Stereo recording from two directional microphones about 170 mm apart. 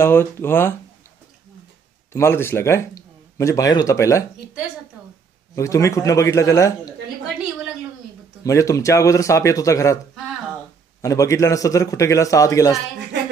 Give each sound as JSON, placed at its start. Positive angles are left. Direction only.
{"t": 0.0, "sound": "a man's voice", "side_deg": 15}
{"t": 2.1, "sound": "a man's voice", "side_deg": 15}
{"t": 5.6, "sound": "a man's voice", "side_deg": 20}
{"t": 8.5, "sound": "a man's voice", "side_deg": 20}
{"t": 11.0, "sound": "a man's voice", "side_deg": 20}